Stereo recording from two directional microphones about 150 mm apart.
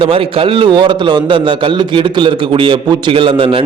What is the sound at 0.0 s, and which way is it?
A man's voice, 35° right (ahead or behind).